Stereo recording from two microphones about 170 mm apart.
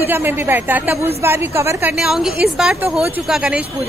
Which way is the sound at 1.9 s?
5° right (ahead or behind).